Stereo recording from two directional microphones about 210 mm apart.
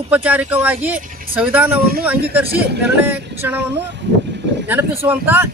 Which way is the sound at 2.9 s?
10° right (ahead or behind).